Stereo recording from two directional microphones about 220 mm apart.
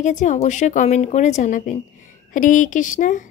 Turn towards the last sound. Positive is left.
turn(degrees=35)  # may be behind; listen again after turning